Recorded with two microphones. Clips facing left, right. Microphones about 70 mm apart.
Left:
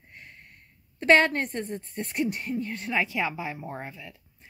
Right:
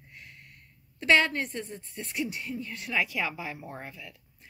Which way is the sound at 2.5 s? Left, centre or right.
Left.